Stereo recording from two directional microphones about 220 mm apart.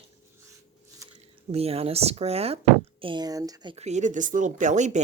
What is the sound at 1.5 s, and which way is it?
Speech, 25° right (ahead or behind).